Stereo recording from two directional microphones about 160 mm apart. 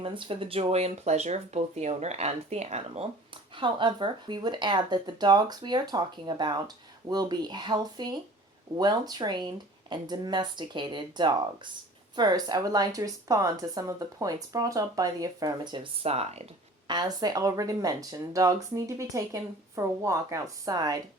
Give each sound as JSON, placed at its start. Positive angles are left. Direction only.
{"t": 0.0, "sound": "speech", "side_deg": -35}
{"t": 3.6, "sound": "speech", "side_deg": -30}
{"t": 16.9, "sound": "speech", "side_deg": -25}